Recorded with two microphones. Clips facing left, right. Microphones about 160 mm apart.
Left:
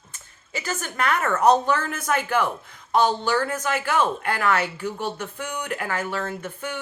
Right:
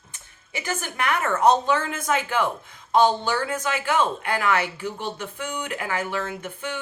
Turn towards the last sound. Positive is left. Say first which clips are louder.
# left 1 dB
turn(degrees=-15)  # may be behind; listen again after turning